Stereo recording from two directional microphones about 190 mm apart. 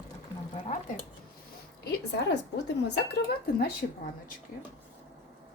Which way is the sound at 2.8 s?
55° left (ahead or behind).